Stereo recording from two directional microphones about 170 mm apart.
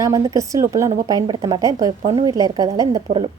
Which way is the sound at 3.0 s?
30° right (ahead or behind).